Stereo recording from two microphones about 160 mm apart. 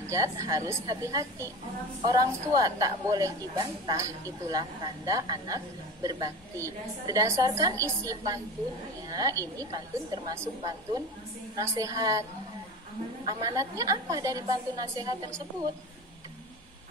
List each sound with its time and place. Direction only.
0.0 s a woman's voice: 20° right (ahead or behind)